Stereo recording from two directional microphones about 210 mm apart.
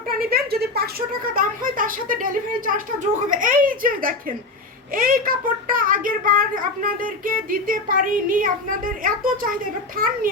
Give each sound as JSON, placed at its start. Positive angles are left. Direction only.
{"t": 0.1, "sound": "speech", "side_deg": -45}